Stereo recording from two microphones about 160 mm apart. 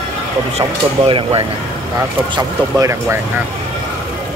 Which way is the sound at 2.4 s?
20° right (ahead or behind).